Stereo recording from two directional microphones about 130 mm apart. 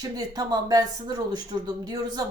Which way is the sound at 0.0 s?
30° right (ahead or behind).